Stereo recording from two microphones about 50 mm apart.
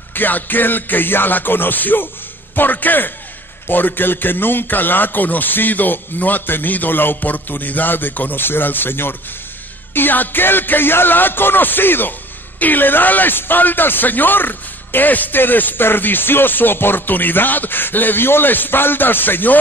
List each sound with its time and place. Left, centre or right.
0.1 s speech: left